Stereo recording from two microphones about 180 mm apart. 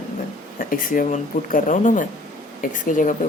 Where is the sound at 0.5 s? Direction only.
45° left (ahead or behind).